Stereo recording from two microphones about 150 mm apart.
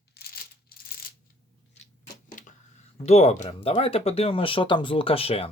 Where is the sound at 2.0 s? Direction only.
60° left (ahead or behind).